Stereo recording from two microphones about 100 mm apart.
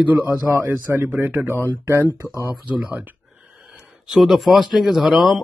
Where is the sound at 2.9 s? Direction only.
15° right (ahead or behind).